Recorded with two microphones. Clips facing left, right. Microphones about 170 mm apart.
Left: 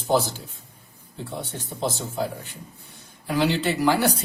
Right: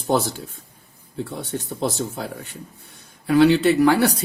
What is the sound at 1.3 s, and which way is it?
Speech, 65° right (ahead or behind).